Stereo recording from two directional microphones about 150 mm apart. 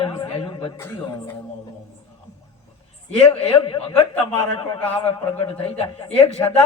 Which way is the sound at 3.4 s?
35° left (ahead or behind).